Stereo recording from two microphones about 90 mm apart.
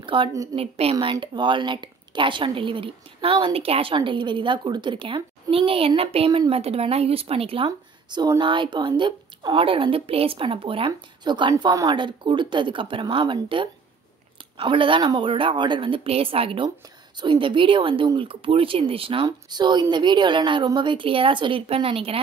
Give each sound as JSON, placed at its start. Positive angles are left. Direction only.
{"t": 0.0, "sound": "a sound", "side_deg": -65}
{"t": 0.6, "sound": "speech", "side_deg": -90}
{"t": 1.2, "sound": "speech", "side_deg": -60}
{"t": 8.4, "sound": "speech", "side_deg": -65}
{"t": 11.2, "sound": "a woman's voice", "side_deg": -60}
{"t": 11.7, "sound": "a woman's voice", "side_deg": -50}
{"t": 17.2, "sound": "speech", "side_deg": -65}
{"t": 19.2, "sound": "a woman's voice", "side_deg": -55}